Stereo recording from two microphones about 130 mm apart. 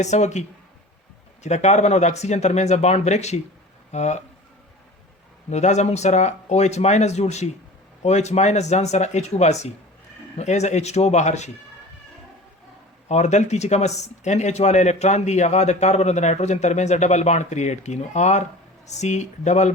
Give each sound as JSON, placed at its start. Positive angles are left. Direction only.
{"t": 0.0, "sound": "speech", "side_deg": 60}
{"t": 1.5, "sound": "speech", "side_deg": 60}
{"t": 5.5, "sound": "speech", "side_deg": 60}
{"t": 13.1, "sound": "speech", "side_deg": 60}